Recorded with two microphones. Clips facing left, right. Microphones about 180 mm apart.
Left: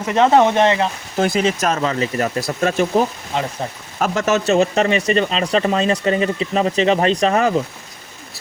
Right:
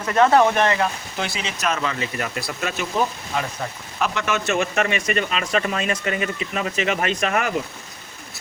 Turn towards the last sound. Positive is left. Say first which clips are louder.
# left 7 dB
turn(degrees=30)  # may be behind; listen again after turning